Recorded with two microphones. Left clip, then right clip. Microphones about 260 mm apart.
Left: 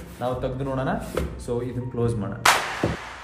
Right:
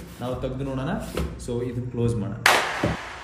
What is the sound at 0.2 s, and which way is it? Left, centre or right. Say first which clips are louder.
Speech: left 3 dB; centre.